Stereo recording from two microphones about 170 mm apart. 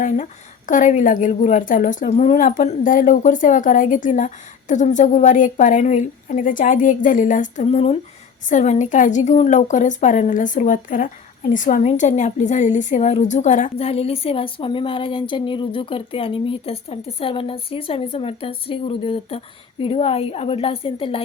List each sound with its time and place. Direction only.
0.7 s a woman's voice: 45° left (ahead or behind)